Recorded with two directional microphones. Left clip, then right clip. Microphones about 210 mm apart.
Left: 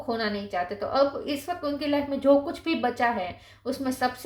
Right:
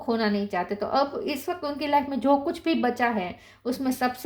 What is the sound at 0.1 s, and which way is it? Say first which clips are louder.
A woman's voice: right 3 dB; 40° right (ahead or behind).